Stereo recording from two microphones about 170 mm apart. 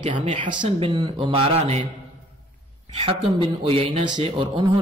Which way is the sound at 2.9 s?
35° right (ahead or behind).